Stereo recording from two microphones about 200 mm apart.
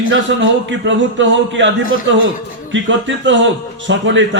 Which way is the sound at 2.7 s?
65° right (ahead or behind).